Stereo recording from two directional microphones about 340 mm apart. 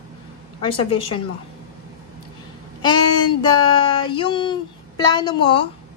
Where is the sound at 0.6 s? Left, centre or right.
Centre.